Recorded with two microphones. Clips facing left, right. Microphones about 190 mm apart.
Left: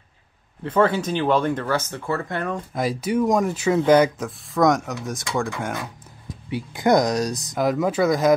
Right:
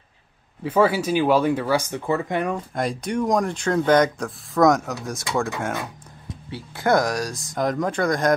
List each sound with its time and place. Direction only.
0.7 s speech: 10° right (ahead or behind)
2.7 s speech: 5° left (ahead or behind)
6.5 s speech: 15° left (ahead or behind)
7.5 s speech: 5° left (ahead or behind)